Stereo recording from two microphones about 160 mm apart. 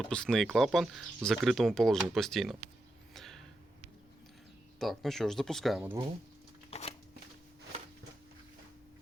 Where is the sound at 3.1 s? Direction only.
Centre (ahead or behind).